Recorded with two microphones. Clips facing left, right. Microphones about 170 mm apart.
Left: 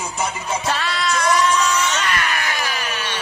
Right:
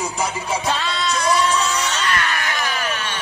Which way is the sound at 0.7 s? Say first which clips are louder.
Left 1 dB; 25° right (ahead or behind).